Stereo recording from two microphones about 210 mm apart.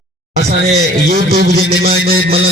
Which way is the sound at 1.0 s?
45° right (ahead or behind).